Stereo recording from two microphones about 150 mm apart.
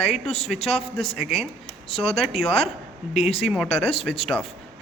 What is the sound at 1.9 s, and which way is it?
Speech, 40° left (ahead or behind).